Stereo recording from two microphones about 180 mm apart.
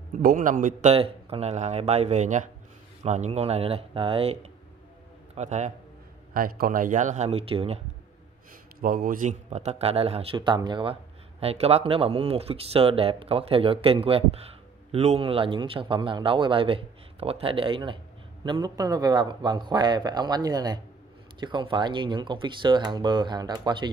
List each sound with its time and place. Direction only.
0.2 s speech: 50° right (ahead or behind)
0.9 s a man's voice: 30° right (ahead or behind)
6.3 s speech: 50° right (ahead or behind); by 7.8 s 30° right (ahead or behind)
8.8 s speech: 50° right (ahead or behind); by 23.9 s 25° right (ahead or behind)